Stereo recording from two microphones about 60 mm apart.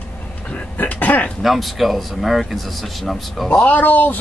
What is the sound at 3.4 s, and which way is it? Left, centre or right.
Speech, left.